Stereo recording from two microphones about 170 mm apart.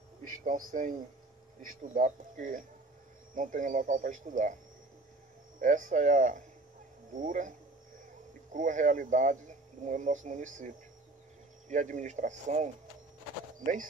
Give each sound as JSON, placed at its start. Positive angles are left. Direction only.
{"t": 0.2, "sound": "a man's voice", "side_deg": -50}
{"t": 5.6, "sound": "speech", "side_deg": -50}
{"t": 8.5, "sound": "speech", "side_deg": -50}
{"t": 11.7, "sound": "speech", "side_deg": -45}